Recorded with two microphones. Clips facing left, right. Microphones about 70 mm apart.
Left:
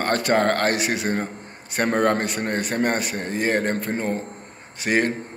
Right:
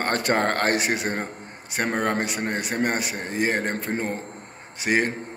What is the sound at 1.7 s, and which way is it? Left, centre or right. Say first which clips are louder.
A man's voice: left 4 dB; centre.